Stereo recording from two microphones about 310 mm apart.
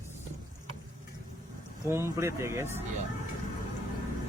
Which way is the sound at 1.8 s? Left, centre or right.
Centre.